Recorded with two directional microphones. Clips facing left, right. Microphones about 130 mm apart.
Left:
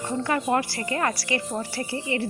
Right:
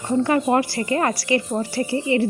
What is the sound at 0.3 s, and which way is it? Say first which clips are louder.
Speech: right 2 dB; 25° right (ahead or behind).